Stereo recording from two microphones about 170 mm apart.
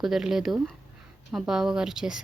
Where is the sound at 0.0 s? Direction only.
Centre (ahead or behind).